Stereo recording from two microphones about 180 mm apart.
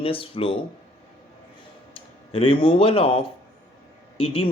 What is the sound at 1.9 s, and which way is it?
Speech, 30° left (ahead or behind).